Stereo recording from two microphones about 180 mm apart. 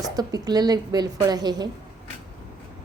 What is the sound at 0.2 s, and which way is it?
A woman's voice, 20° right (ahead or behind).